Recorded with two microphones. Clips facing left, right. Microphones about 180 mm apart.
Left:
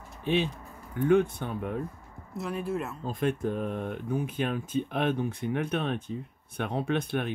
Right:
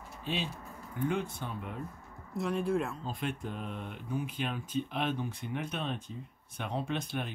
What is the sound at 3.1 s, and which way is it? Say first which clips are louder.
Speech: left 8 dB; 50° left (ahead or behind).